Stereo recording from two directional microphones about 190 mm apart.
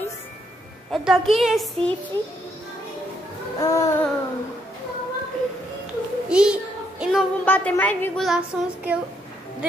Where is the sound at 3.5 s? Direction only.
15° left (ahead or behind).